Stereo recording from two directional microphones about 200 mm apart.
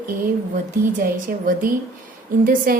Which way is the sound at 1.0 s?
45° right (ahead or behind).